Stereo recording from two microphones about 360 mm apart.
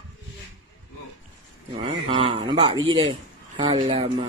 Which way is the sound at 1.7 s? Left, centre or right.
Centre.